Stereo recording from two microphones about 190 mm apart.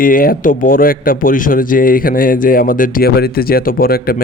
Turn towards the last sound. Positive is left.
turn(degrees=50)  # may be behind; listen again after turning